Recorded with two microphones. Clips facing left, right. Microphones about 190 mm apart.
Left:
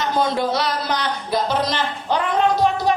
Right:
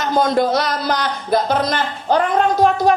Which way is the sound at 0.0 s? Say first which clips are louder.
Right 4 dB; 45° right (ahead or behind).